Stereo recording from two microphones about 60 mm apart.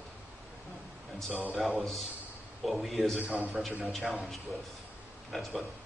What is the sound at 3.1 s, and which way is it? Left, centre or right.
Speech, right.